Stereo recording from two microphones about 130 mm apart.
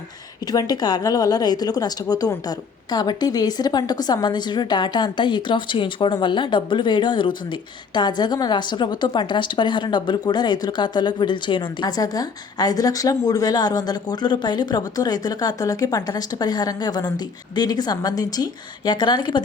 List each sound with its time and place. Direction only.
0.5 s a woman's voice: 30° left (ahead or behind)